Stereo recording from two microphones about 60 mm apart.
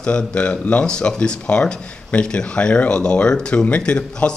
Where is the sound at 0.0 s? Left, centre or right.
Centre.